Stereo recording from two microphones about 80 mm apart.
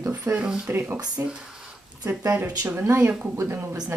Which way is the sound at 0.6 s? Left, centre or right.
Right.